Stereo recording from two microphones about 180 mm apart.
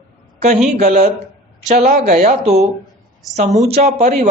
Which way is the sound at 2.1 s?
35° right (ahead or behind).